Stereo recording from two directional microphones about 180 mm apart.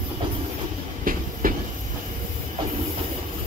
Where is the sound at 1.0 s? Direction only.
50° right (ahead or behind).